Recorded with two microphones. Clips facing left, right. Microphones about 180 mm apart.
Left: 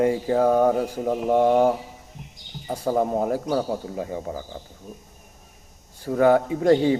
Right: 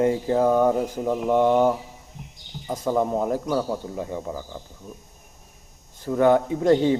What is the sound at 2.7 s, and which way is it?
Speech, 35° left (ahead or behind).